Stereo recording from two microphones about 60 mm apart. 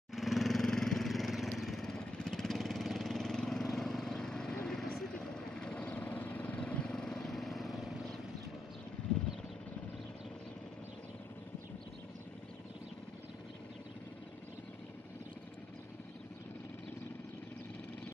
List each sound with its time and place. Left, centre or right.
0.1 s vehicle: centre
5.5 s vehicle: centre
5.9 s vehicle: left
6.9 s vehicle: centre